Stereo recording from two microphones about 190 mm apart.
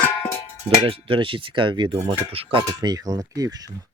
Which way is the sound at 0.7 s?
30° right (ahead or behind).